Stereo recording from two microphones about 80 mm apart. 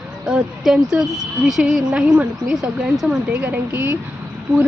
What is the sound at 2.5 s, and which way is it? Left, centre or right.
Speech, centre.